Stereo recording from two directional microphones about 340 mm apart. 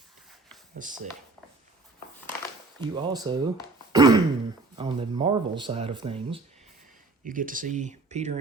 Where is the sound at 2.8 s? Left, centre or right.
Centre.